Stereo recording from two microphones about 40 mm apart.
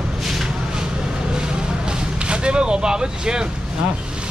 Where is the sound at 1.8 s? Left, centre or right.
Right.